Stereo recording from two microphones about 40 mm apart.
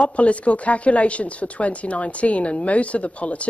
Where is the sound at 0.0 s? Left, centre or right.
Left.